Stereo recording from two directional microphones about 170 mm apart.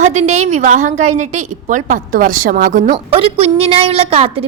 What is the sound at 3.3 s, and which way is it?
Speech, 35° right (ahead or behind).